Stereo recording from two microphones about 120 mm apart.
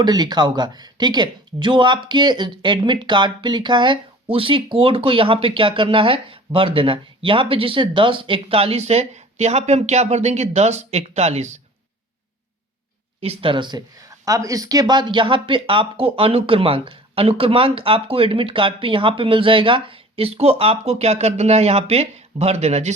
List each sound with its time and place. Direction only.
0.0 s speech: 35° right (ahead or behind); by 11.6 s 70° right (ahead or behind)
13.2 s speech: 45° right (ahead or behind); by 23.0 s 65° right (ahead or behind)